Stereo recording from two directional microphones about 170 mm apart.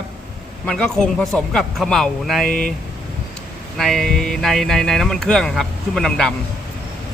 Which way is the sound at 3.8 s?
Centre (ahead or behind).